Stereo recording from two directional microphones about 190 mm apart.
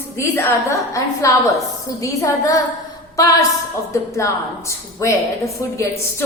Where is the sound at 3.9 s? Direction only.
15° left (ahead or behind).